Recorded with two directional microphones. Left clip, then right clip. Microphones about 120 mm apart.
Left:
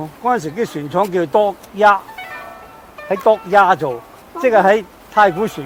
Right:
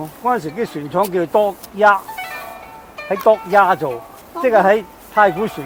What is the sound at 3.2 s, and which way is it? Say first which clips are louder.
Speech: left 1 dB; 55° left (ahead or behind).